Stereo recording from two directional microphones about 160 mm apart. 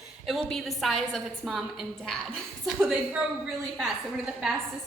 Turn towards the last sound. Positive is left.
turn(degrees=0)  # may be behind; listen again after turning